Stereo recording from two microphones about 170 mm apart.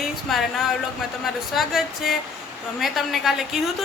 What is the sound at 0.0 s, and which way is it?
A woman's voice, centre (ahead or behind).